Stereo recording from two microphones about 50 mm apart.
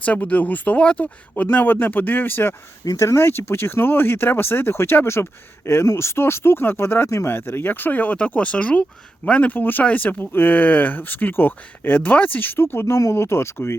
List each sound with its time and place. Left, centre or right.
0.0 s speech: left
3.0 s speech: left
9.5 s speech: left
12.4 s speech: left
12.8 s speech: left